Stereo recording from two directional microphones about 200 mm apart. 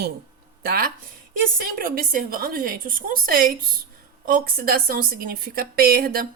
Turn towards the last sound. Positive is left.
turn(degrees=-50)  # may be behind; listen again after turning